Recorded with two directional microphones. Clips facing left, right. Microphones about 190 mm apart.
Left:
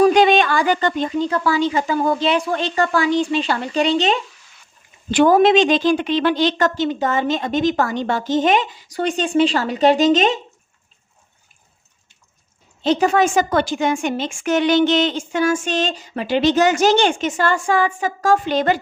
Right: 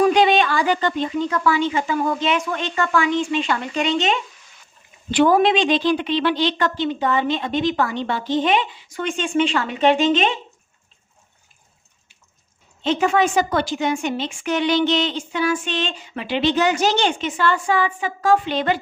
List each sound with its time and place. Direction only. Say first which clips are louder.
0.0 s a sound: left 3 dB; 45° left (ahead or behind)
1.2 s a woman's voice: left 1 dB; 35° left (ahead or behind)
12.8 s a woman's voice: left 2 dB; 40° left (ahead or behind)